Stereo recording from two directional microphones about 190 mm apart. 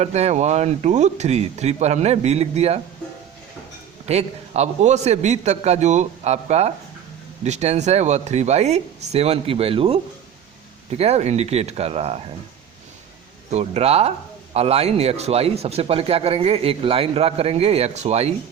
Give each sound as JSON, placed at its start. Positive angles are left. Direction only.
{"t": 0.0, "sound": "a man's voice", "side_deg": -35}
{"t": 4.0, "sound": "a man's voice", "side_deg": -35}
{"t": 13.5, "sound": "a man's voice", "side_deg": -35}